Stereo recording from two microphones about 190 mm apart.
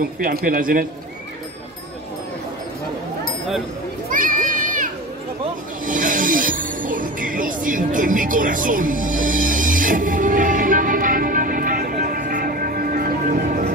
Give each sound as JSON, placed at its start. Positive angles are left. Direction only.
{"t": 0.0, "sound": "a man's voice", "side_deg": -50}
{"t": 4.1, "sound": "a sound", "side_deg": -45}
{"t": 5.9, "sound": "music", "side_deg": -45}